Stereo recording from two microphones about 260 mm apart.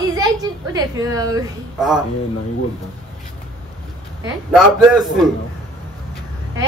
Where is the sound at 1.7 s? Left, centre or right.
Centre.